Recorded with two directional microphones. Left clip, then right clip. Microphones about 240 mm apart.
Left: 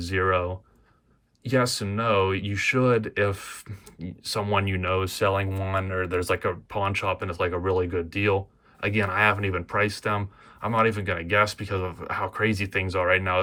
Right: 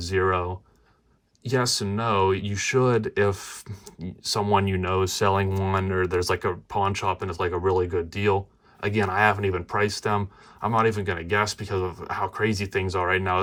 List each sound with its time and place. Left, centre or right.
0.0 s speech: centre